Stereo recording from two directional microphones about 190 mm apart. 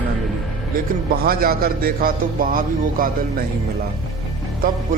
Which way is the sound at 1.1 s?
50° right (ahead or behind).